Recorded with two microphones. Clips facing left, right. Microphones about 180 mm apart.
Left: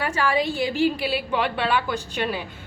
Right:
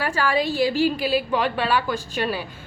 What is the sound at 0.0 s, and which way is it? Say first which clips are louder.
A woman's voice: right 1 dB; 20° left (ahead or behind).